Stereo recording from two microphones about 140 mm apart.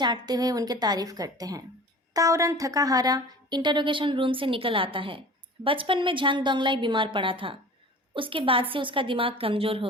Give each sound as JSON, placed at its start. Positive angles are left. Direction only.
{"t": 0.0, "sound": "a woman's voice", "side_deg": -30}